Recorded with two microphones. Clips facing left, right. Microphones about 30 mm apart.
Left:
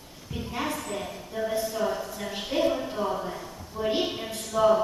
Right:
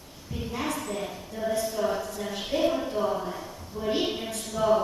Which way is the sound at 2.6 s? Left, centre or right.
Centre.